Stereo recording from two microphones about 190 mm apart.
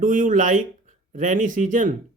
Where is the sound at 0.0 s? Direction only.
45° right (ahead or behind).